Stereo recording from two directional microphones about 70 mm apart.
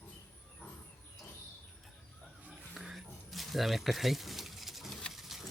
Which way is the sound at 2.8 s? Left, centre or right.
Centre.